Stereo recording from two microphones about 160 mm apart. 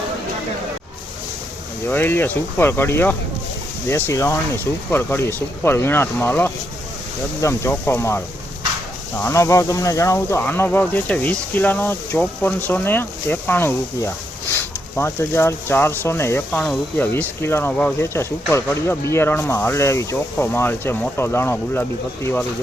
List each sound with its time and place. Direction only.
1.9 s speech: 15° left (ahead or behind)